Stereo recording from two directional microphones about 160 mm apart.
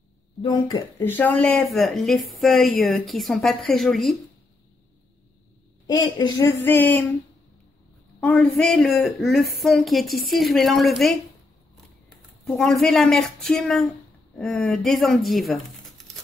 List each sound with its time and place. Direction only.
0.7 s speech: 25° left (ahead or behind)
1.0 s a woman's voice: 10° left (ahead or behind)
5.9 s speech: 25° left (ahead or behind)
8.2 s a woman's voice: 5° left (ahead or behind)
11.7 s a sound: centre (ahead or behind)
12.8 s a woman's voice: 5° left (ahead or behind)